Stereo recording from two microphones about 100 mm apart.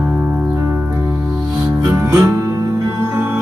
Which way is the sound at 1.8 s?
30° right (ahead or behind).